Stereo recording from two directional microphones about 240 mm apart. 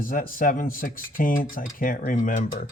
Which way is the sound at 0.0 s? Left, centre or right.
Left.